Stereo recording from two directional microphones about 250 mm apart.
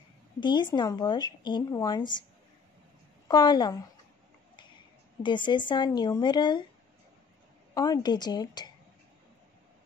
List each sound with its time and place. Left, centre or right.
0.4 s speech: centre
3.3 s speech: centre
5.2 s speech: centre
7.7 s speech: centre